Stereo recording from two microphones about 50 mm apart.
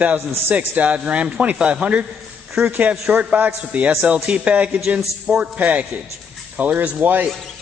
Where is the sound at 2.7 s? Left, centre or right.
Right.